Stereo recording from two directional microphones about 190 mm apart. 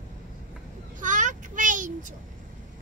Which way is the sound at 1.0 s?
40° right (ahead or behind).